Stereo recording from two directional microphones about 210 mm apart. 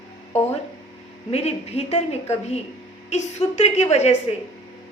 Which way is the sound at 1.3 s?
30° left (ahead or behind).